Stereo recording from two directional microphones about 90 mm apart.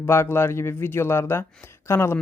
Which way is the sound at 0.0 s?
25° left (ahead or behind).